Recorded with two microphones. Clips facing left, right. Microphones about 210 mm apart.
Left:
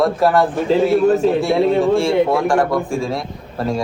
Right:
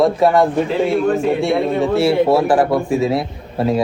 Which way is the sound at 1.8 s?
5° right (ahead or behind).